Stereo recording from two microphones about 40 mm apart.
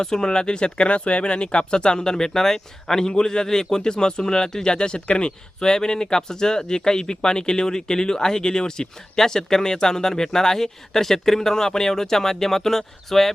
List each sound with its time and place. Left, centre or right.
0.0 s speech: centre